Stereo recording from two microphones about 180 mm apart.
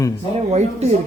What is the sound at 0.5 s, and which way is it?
Speech, 40° right (ahead or behind).